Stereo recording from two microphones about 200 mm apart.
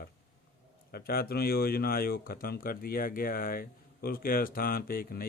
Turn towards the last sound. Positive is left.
turn(degrees=45)  # may be behind; listen again after turning